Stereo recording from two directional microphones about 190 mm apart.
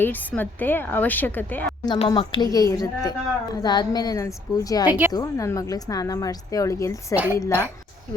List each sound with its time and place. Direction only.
0.0 s a woman's voice: 10° left (ahead or behind)
1.8 s a woman's voice: 20° left (ahead or behind)
4.9 s a woman's voice: 10° right (ahead or behind)
5.1 s a woman's voice: 15° left (ahead or behind)